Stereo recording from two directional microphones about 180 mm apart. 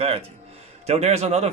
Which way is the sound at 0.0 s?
35° right (ahead or behind).